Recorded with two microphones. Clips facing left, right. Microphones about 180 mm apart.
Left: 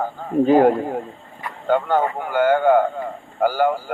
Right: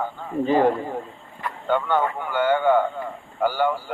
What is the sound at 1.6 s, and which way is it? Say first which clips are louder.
A man's voice: left 3 dB; 45° left (ahead or behind).